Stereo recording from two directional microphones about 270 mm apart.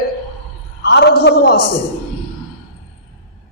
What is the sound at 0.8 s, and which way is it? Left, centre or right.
Speech, left.